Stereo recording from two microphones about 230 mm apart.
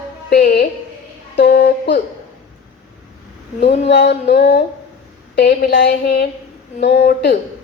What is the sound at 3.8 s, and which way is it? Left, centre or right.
A woman's voice, left.